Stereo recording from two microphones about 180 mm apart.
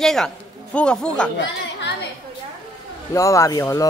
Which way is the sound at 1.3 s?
75° left (ahead or behind).